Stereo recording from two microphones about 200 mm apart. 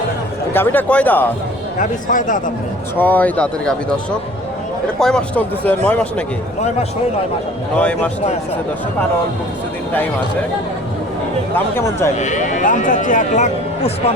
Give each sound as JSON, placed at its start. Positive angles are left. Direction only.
{"t": 0.5, "sound": "a man's voice", "side_deg": 10}
{"t": 1.8, "sound": "speech", "side_deg": 40}
{"t": 3.0, "sound": "a man's voice", "side_deg": 10}
{"t": 7.8, "sound": "a man's voice", "side_deg": 5}
{"t": 11.5, "sound": "a man's voice", "side_deg": 15}
{"t": 12.1, "sound": "speech", "side_deg": 35}